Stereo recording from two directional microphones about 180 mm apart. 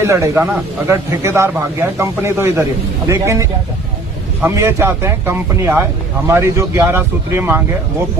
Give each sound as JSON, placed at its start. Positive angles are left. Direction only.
{"t": 0.0, "sound": "speech", "side_deg": -15}